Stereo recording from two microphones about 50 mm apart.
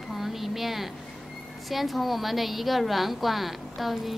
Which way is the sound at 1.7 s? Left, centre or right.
Centre.